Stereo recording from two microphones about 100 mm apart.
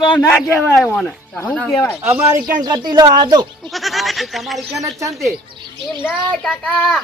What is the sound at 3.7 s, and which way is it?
Speech, centre (ahead or behind).